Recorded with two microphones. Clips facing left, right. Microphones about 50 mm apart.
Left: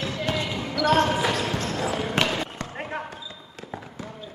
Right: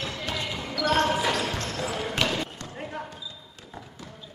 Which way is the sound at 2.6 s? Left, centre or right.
Left.